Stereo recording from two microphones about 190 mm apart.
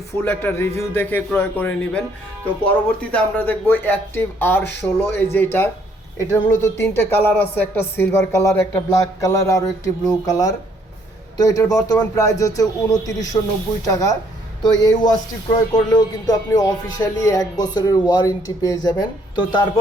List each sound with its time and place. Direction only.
0.3 s speech: 10° left (ahead or behind)